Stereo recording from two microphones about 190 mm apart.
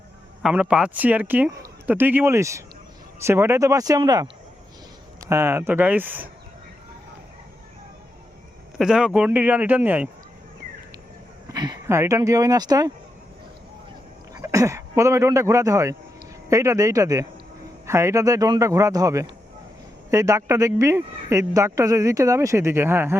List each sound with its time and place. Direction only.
0.4 s speech: 5° right (ahead or behind)
8.8 s speech: 5° right (ahead or behind)
11.4 s speech: 20° right (ahead or behind)
14.3 s speech: 15° right (ahead or behind)